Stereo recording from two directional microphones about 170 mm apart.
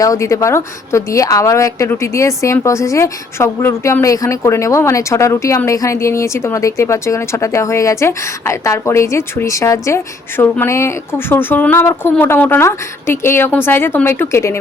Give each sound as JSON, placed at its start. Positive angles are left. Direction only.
{"t": 0.0, "sound": "a woman's voice", "side_deg": 20}